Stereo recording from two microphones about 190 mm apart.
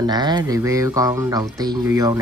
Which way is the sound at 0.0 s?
20° right (ahead or behind).